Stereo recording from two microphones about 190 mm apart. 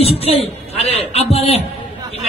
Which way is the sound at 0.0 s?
30° left (ahead or behind).